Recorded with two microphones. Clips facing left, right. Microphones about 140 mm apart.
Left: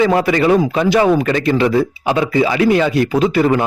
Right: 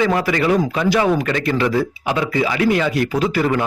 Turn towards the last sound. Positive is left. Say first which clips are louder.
# left 4 dB
turn(degrees=25)  # may be behind; listen again after turning